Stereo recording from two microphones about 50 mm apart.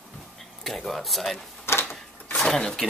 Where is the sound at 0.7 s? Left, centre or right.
Centre.